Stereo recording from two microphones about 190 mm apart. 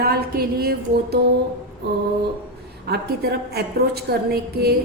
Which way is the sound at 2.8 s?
60° right (ahead or behind).